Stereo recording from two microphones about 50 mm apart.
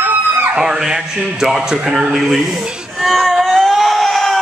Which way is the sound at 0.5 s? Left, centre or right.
Centre.